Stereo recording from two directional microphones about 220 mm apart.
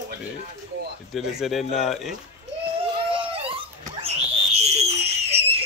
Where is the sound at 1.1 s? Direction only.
Centre (ahead or behind).